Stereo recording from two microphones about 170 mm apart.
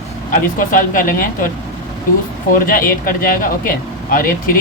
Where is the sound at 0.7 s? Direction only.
55° left (ahead or behind).